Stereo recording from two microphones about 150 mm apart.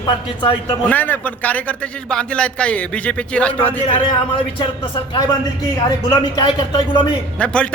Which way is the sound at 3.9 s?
35° left (ahead or behind).